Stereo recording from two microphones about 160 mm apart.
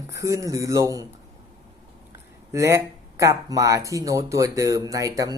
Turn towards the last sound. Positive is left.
turn(degrees=-20)  # may be behind; listen again after turning